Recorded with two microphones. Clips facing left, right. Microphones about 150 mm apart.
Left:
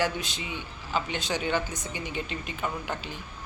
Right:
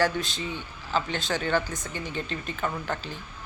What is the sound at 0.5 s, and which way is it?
Speech, 15° left (ahead or behind).